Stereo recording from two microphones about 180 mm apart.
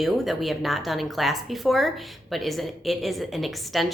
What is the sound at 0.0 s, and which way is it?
Speech, centre (ahead or behind).